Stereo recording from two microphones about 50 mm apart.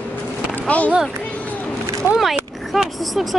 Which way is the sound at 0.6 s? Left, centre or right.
Left.